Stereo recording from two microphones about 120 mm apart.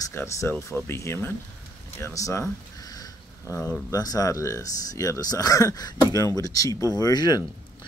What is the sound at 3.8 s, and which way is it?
Speech, 30° left (ahead or behind).